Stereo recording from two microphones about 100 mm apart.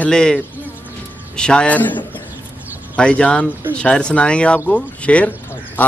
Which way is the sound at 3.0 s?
10° left (ahead or behind).